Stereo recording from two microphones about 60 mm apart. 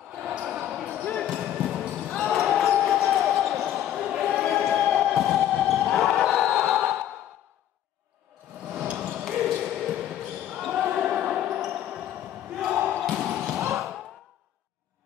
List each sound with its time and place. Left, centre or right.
0.2 s basketball bounce: centre
2.0 s basketball bounce: centre
8.8 s ping: right
9.3 s basketball bounce: centre